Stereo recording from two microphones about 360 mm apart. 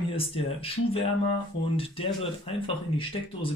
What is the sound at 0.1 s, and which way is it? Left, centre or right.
Speech, centre.